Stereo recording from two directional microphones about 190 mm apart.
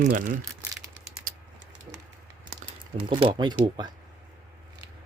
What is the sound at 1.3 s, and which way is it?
Typing, 45° right (ahead or behind).